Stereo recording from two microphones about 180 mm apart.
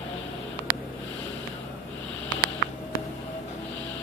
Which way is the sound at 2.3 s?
20° left (ahead or behind).